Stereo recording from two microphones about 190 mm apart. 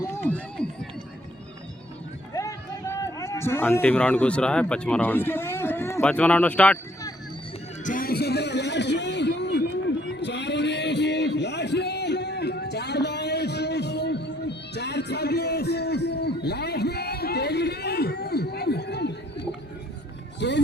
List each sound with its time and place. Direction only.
0.0 s run: 10° left (ahead or behind)
2.3 s a man's voice: 15° left (ahead or behind)
7.9 s a sound: 50° left (ahead or behind)
20.4 s music: 65° left (ahead or behind)